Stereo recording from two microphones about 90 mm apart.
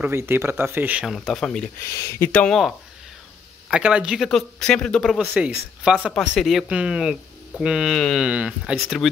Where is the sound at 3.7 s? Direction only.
10° right (ahead or behind); by 5.1 s 10° left (ahead or behind).